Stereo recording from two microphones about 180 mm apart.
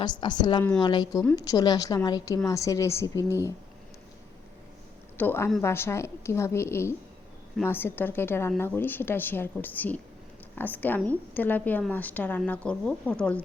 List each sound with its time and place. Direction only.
0.0 s a woman's voice: 25° left (ahead or behind)
5.1 s a woman's voice: 10° left (ahead or behind)